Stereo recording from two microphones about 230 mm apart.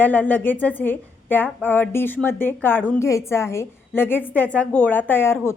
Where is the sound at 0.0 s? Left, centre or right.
Centre.